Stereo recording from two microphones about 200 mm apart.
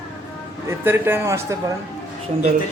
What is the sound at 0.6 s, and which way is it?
Speech, 10° right (ahead or behind).